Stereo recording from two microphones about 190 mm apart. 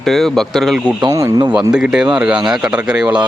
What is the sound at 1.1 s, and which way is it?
Speech, 20° right (ahead or behind).